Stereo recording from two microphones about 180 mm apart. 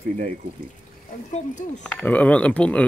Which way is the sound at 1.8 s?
5° left (ahead or behind).